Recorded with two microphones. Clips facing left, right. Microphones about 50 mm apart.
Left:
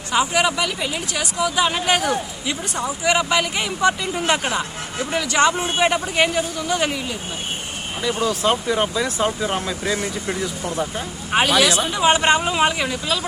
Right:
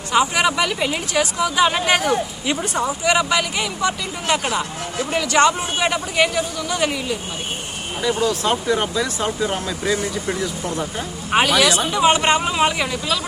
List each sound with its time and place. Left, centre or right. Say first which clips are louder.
0.1 s speech: right 1 dB; centre
3.0 s speech: left 1 dB; centre
5.1 s speech: right 2 dB; centre
5.7 s speech: left 1 dB; centre